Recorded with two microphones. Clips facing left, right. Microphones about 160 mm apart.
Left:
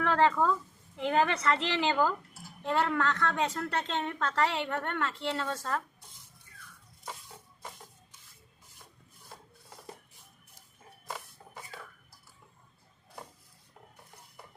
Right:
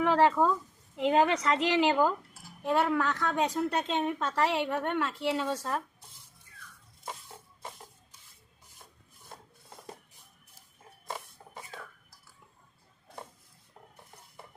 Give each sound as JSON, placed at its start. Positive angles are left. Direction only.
{"t": 0.0, "sound": "a woman's voice", "side_deg": -15}